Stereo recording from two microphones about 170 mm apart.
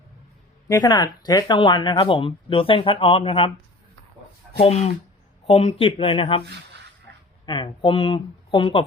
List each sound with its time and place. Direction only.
0.7 s speech: 25° left (ahead or behind)
4.6 s speech: 40° left (ahead or behind)
6.4 s speech: 85° right
7.4 s speech: 30° left (ahead or behind)